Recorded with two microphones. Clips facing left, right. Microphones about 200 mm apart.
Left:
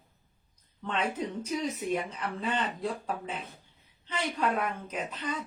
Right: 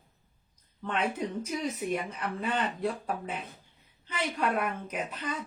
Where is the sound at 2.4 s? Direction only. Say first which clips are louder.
Right 1 dB; 10° right (ahead or behind).